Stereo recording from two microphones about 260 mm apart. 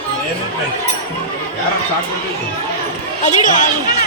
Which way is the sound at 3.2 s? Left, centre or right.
Left.